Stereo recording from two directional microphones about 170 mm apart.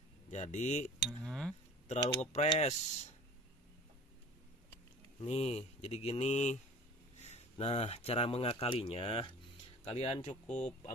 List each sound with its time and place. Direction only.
0.3 s speech: 45° left (ahead or behind)
1.2 s speech: 5° left (ahead or behind)
1.9 s speech: 40° left (ahead or behind)
5.2 s speech: 40° left (ahead or behind)